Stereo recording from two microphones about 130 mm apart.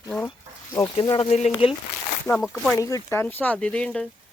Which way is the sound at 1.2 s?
55° left (ahead or behind).